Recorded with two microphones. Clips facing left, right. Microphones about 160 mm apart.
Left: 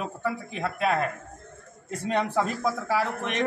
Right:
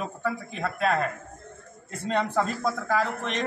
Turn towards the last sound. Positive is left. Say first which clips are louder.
# even
turn(degrees=10)  # may be behind; listen again after turning